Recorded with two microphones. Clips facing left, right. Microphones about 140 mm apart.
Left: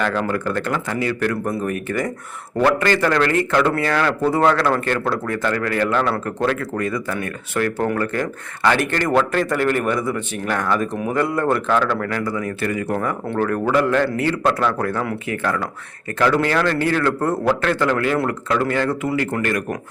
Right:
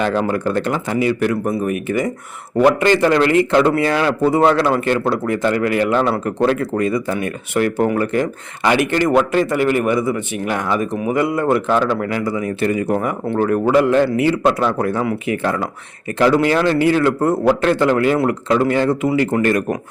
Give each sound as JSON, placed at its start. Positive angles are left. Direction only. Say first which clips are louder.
{"t": 0.0, "sound": "a man's voice", "louder": "right 3 dB", "side_deg": -20}